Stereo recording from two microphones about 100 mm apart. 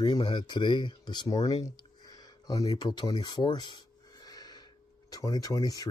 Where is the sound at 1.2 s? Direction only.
40° left (ahead or behind).